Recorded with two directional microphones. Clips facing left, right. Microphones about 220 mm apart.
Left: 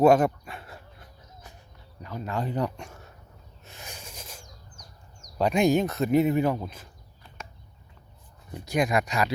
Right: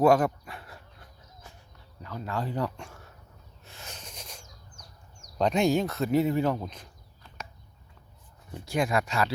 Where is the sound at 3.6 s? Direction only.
15° left (ahead or behind).